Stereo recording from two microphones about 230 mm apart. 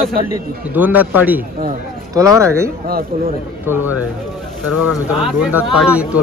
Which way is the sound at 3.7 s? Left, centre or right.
Centre.